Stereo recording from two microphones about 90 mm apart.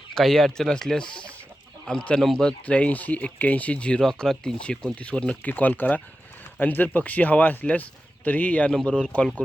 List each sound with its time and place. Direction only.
0.1 s speech: 5° left (ahead or behind)